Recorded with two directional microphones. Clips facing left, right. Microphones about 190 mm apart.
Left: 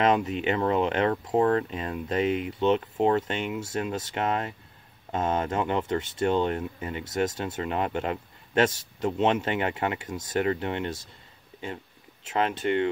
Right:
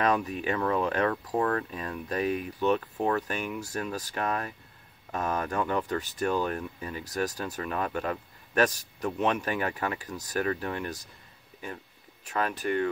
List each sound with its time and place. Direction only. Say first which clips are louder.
0.0 s speech: left 4 dB; 25° left (ahead or behind)